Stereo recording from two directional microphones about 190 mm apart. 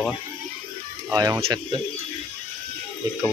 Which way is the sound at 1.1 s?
20° right (ahead or behind).